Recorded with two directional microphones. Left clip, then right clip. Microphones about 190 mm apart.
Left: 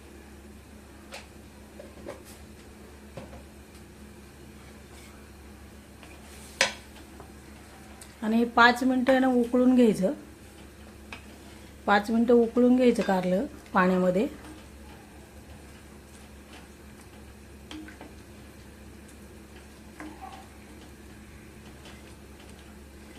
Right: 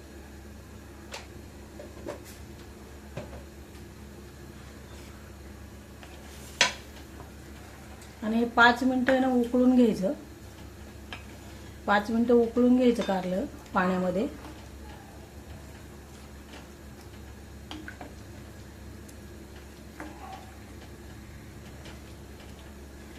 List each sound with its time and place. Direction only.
8.2 s speech: 40° left (ahead or behind)
11.9 s speech: 30° left (ahead or behind)